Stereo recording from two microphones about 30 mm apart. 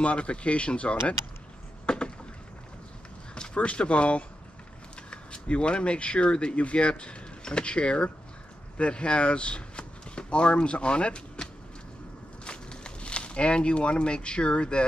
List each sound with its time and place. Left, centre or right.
0.0 s speech: left
1.9 s a sound: left
3.5 s speech: left
12.4 s speech: left